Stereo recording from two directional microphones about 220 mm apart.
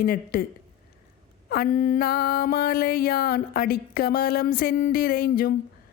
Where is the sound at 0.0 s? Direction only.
40° left (ahead or behind).